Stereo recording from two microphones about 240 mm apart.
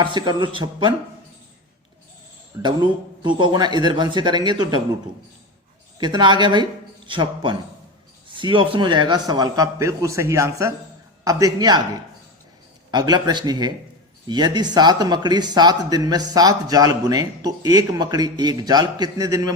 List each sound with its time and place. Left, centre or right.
0.0 s speech: centre
2.5 s speech: centre
6.0 s speech: centre
12.9 s speech: centre